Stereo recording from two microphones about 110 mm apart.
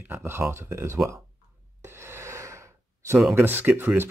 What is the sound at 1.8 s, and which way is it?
Gasp, 20° right (ahead or behind).